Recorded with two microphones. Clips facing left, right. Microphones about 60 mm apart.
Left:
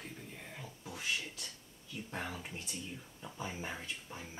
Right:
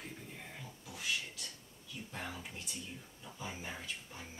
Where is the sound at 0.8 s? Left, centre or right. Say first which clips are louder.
Left 2 dB; left.